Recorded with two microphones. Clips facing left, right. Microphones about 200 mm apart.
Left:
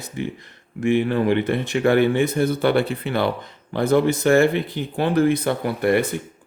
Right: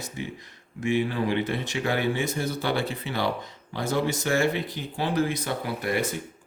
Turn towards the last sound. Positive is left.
turn(degrees=60)  # may be behind; listen again after turning